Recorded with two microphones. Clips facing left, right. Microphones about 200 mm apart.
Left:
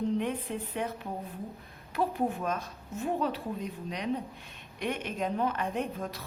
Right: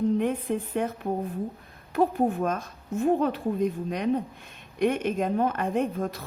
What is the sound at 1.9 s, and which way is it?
A woman's voice, 50° right (ahead or behind).